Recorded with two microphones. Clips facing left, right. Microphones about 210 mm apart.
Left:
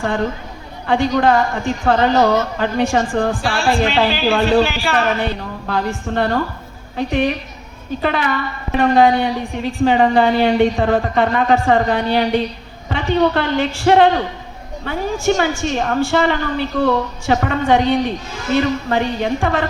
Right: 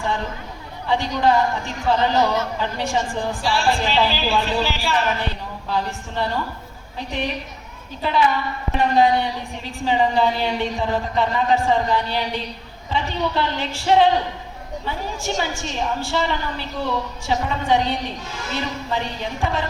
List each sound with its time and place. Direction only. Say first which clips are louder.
1.2 s speech: left 3 dB; 50° left (ahead or behind)
4.8 s a woman's voice: left 4 dB; 65° left (ahead or behind)